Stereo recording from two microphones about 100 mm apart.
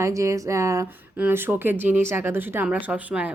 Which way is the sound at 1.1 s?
20° right (ahead or behind).